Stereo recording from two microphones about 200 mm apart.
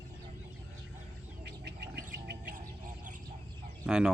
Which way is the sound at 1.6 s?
55° right (ahead or behind).